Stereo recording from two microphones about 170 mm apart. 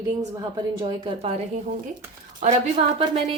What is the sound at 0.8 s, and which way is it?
Speech, 30° right (ahead or behind).